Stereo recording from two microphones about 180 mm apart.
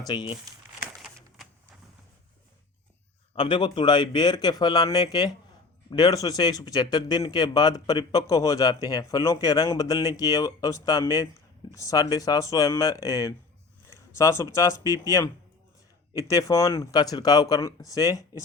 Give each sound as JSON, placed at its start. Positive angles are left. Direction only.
{"t": 0.1, "sound": "speech", "side_deg": 25}
{"t": 3.3, "sound": "speech", "side_deg": 25}